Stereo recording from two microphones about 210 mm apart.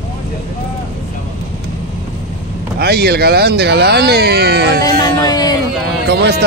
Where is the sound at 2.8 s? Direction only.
50° right (ahead or behind).